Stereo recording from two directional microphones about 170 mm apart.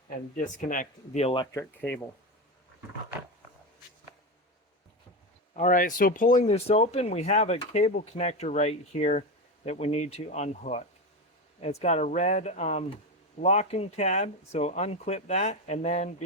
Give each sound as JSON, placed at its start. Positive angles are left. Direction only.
{"t": 0.3, "sound": "speech", "side_deg": 50}
{"t": 1.2, "sound": "speech", "side_deg": 30}
{"t": 1.5, "sound": "speech", "side_deg": 10}
{"t": 5.5, "sound": "speech", "side_deg": 50}